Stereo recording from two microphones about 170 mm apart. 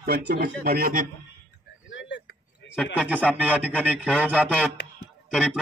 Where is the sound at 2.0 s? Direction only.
90° left.